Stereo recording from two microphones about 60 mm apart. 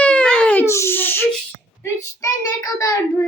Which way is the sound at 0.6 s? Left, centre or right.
Left.